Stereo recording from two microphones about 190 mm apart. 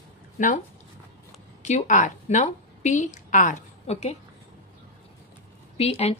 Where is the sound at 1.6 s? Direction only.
40° left (ahead or behind).